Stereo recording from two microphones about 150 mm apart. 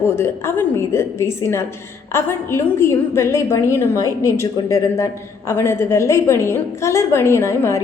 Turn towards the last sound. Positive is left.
turn(degrees=20)  # may be behind; listen again after turning